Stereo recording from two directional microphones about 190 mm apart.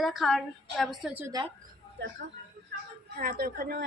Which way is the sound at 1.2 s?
20° right (ahead or behind).